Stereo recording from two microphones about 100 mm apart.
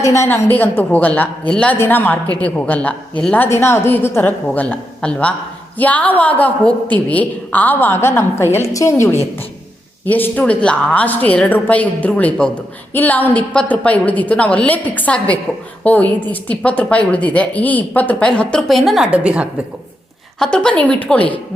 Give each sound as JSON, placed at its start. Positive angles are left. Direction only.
{"t": 0.0, "sound": "a woman's voice", "side_deg": 30}
{"t": 19.1, "sound": "a woman's voice", "side_deg": -10}
{"t": 20.4, "sound": "a woman's voice", "side_deg": 10}